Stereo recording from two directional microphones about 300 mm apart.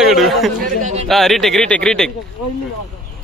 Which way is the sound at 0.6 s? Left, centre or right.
Right.